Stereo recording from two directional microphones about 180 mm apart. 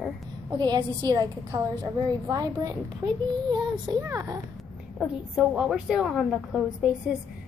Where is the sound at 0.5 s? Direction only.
25° right (ahead or behind).